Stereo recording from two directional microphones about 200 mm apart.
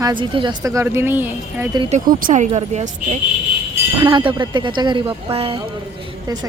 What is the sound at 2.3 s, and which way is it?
Speech, 30° right (ahead or behind).